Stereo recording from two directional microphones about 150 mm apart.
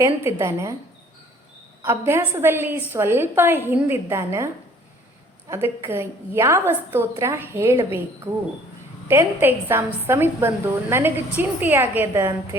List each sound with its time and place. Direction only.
0.0 s a woman's voice: 15° right (ahead or behind)
1.8 s a woman's voice: 15° right (ahead or behind)
5.5 s a woman's voice: 20° right (ahead or behind)